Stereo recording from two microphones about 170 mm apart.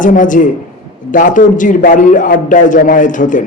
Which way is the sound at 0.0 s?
50° left (ahead or behind).